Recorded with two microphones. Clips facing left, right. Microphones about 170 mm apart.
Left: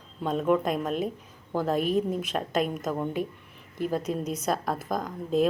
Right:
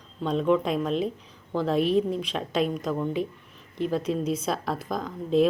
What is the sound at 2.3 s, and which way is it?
Speech, 5° left (ahead or behind).